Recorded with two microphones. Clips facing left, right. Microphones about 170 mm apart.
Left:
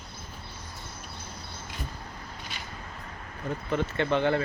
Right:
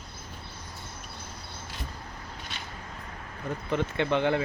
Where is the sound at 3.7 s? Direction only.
15° right (ahead or behind).